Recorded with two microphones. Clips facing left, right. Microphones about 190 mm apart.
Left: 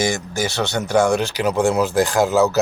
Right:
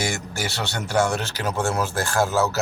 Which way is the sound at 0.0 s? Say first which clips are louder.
Left 6 dB; 15° left (ahead or behind).